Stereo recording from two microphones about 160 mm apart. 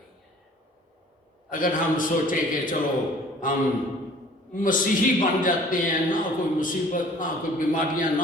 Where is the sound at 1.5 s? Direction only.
60° left (ahead or behind).